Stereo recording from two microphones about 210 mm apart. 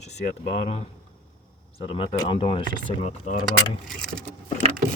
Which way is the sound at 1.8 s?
25° left (ahead or behind).